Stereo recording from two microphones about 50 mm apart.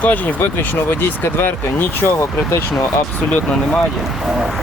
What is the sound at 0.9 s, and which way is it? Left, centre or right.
Speech, left.